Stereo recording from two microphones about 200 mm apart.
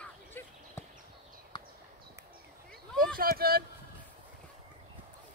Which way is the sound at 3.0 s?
45° right (ahead or behind).